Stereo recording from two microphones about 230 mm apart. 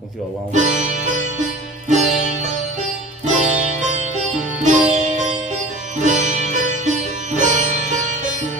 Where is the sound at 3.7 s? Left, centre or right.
Right.